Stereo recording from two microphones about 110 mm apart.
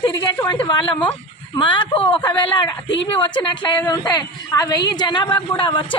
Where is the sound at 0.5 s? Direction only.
50° left (ahead or behind).